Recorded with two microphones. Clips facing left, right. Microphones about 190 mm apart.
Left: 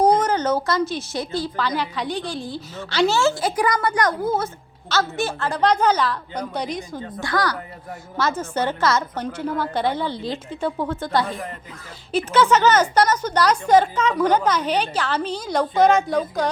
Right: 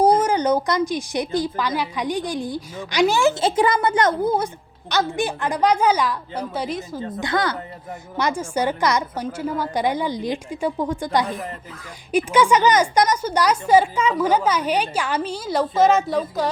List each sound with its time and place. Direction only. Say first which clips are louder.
0.0 s speech: right 1 dB; 10° right (ahead or behind)
7.2 s a woman's voice: even; 20° right (ahead or behind); by 16.5 s centre (ahead or behind)